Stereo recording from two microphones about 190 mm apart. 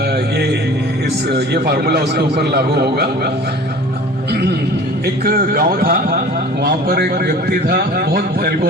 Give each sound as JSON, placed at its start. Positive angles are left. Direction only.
{"t": 1.3, "sound": "a man's voice", "side_deg": -55}
{"t": 5.2, "sound": "a man's voice", "side_deg": -50}